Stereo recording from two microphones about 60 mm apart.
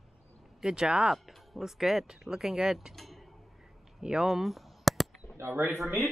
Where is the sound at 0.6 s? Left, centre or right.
Centre.